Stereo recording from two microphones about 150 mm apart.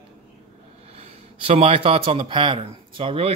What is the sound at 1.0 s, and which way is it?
Speech, 40° right (ahead or behind).